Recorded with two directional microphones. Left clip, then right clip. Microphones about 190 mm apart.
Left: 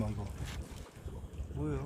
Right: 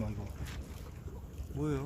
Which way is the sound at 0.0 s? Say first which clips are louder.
Left 2 dB; 50° left (ahead or behind).